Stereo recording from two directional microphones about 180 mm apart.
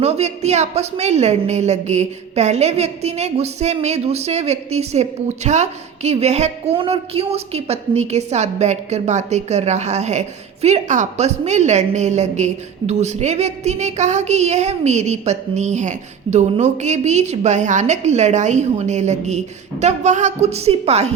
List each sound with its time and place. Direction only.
0.0 s a woman's voice: 35° right (ahead or behind)